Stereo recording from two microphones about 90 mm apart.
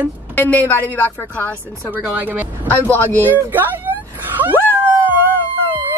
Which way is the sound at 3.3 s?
20° right (ahead or behind).